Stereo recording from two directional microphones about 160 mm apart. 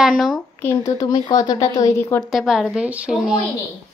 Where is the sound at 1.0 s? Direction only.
20° left (ahead or behind).